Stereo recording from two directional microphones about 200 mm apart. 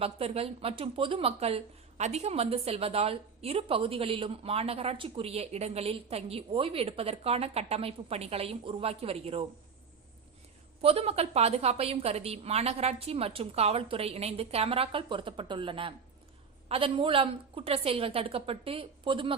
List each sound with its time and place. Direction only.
0.0 s speech: 30° right (ahead or behind)
10.8 s speech: 30° right (ahead or behind)